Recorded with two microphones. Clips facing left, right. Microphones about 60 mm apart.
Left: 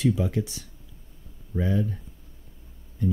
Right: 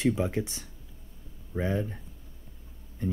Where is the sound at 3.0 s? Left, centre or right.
Right.